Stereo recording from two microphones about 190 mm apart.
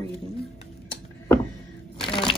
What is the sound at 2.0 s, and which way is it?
Shuffling cards, 25° left (ahead or behind).